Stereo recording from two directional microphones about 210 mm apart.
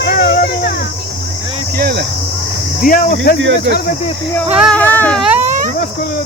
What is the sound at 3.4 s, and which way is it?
Speech, 60° right (ahead or behind).